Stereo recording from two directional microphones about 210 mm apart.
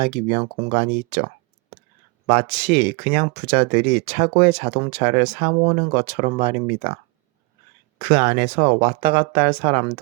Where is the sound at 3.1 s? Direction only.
30° right (ahead or behind).